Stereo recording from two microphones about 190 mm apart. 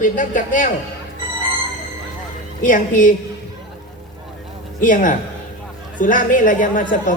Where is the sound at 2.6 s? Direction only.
45° left (ahead or behind).